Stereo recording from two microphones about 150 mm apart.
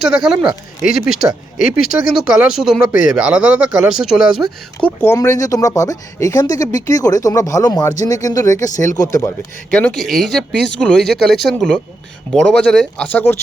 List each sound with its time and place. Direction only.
0.0 s speech: 5° right (ahead or behind)
4.8 s speech: 15° left (ahead or behind)
9.6 s speech: 5° left (ahead or behind)